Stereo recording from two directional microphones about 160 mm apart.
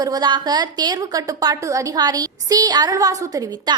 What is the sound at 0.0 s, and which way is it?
A woman's voice, 25° right (ahead or behind).